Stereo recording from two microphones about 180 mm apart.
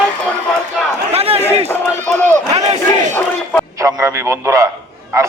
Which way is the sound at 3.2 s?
10° left (ahead or behind).